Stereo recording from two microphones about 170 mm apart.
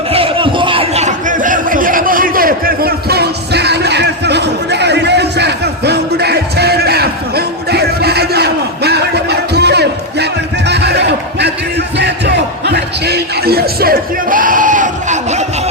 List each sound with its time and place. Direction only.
0.1 s a sound: 35° right (ahead or behind); by 11.5 s 80° right
11.9 s crowd: 90° right
12.7 s music: 70° right (ahead or behind); by 15.4 s 45° right (ahead or behind)